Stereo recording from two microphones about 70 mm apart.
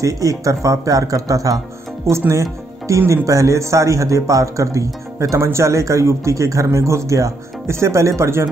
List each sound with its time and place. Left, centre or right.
0.0 s speech: right
2.0 s speech: right